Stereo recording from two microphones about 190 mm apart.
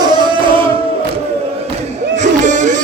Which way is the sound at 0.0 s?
25° right (ahead or behind).